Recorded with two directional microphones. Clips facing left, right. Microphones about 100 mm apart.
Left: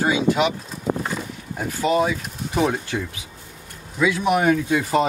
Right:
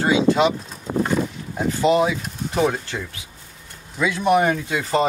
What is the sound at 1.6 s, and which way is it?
Speech, centre (ahead or behind).